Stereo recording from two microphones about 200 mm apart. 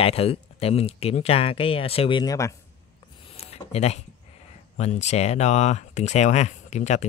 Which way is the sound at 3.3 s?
30° left (ahead or behind).